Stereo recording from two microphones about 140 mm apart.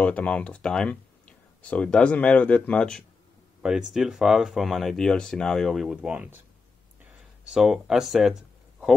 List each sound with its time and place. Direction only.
0.0 s speech: 10° left (ahead or behind); by 6.4 s 10° right (ahead or behind)
7.4 s speech: 5° right (ahead or behind)